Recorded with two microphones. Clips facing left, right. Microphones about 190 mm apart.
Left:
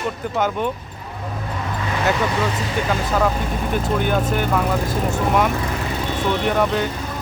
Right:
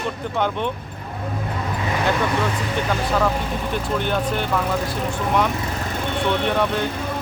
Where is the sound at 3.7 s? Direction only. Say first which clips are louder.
Left 3 dB; 10° left (ahead or behind).